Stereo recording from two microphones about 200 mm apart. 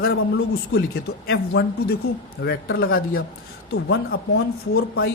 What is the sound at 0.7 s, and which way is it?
A man's voice, 55° left (ahead or behind).